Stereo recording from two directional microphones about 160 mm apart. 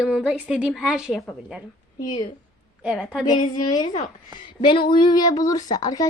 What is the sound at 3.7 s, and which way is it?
Speech, 30° left (ahead or behind).